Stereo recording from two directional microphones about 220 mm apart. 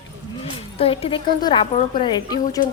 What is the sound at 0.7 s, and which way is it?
Speech, 25° left (ahead or behind).